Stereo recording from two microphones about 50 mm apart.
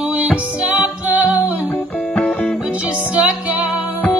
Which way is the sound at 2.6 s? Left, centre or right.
Right.